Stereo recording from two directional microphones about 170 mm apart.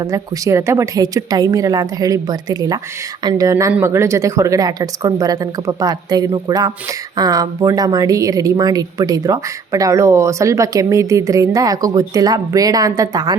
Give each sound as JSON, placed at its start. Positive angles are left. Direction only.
{"t": 0.0, "sound": "speech", "side_deg": -20}